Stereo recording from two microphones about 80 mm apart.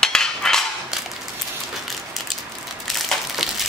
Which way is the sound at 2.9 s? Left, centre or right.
Centre.